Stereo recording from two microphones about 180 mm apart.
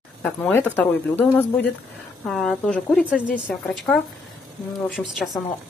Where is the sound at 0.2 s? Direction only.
10° left (ahead or behind).